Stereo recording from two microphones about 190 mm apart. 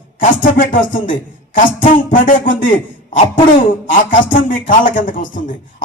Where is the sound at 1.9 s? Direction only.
45° left (ahead or behind).